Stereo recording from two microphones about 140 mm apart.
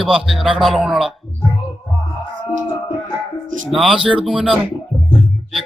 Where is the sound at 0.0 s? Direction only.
5° right (ahead or behind).